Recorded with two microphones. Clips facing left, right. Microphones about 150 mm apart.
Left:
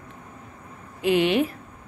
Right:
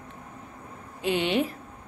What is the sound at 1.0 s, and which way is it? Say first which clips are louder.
Speech: left 5 dB; 30° right (ahead or behind).